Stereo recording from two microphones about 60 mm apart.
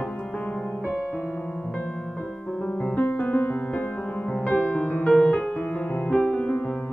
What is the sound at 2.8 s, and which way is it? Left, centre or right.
Music, left.